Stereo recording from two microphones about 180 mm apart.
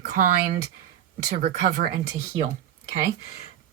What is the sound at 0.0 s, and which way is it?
A woman's voice, 60° right (ahead or behind).